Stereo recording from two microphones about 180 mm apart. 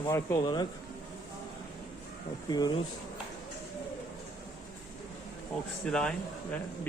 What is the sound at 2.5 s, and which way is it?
Speech, 25° left (ahead or behind).